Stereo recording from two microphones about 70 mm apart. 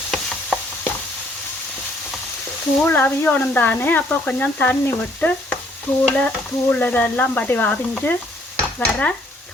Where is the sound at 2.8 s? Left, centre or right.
Left.